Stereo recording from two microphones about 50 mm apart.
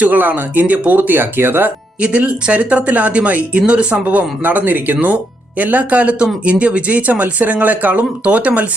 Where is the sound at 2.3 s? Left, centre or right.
Right.